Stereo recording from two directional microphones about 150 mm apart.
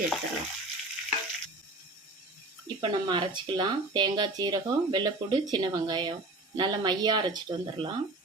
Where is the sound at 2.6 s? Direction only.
30° right (ahead or behind).